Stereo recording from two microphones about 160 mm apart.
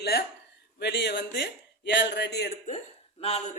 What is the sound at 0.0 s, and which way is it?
A man's voice, 85° left.